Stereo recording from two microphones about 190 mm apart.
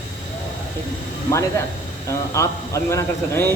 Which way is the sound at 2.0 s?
15° left (ahead or behind).